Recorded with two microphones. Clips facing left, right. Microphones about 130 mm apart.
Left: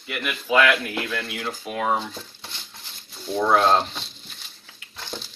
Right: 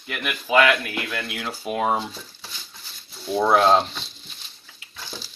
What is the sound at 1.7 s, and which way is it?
Speech, 25° right (ahead or behind).